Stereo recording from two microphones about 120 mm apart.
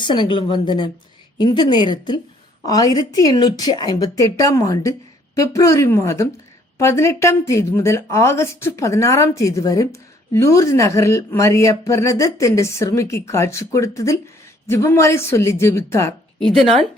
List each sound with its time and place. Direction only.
0.0 s a woman's voice: 40° left (ahead or behind); by 16.1 s 20° left (ahead or behind)
16.6 s a woman's voice: centre (ahead or behind)